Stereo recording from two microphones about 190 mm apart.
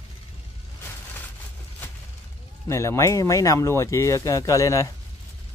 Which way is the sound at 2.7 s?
15° left (ahead or behind).